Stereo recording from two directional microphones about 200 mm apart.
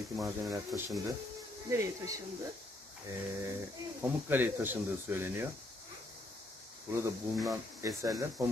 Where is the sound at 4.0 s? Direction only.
10° right (ahead or behind).